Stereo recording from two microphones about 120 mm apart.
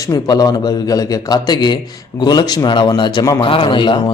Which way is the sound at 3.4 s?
45° left (ahead or behind).